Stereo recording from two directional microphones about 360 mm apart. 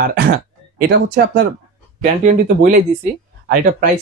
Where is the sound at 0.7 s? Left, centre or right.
Right.